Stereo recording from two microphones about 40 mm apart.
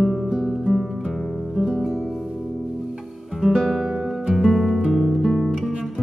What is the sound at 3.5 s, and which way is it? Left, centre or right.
Music, centre.